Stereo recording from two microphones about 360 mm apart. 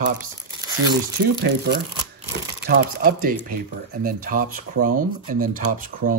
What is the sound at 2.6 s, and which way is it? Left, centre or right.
Speech, right.